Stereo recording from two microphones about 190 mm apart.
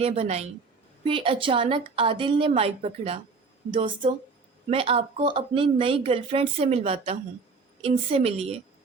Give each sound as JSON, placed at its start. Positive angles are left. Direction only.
{"t": 0.0, "sound": "a woman's voice", "side_deg": -35}